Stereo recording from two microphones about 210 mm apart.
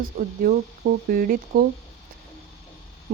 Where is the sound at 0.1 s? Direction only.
35° right (ahead or behind).